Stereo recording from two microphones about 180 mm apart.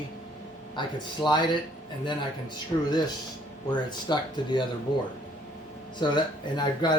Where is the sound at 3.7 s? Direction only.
25° left (ahead or behind).